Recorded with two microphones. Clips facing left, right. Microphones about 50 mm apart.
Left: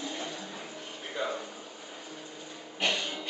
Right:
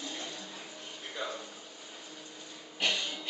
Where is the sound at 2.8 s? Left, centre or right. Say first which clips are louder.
Left 2 dB; centre.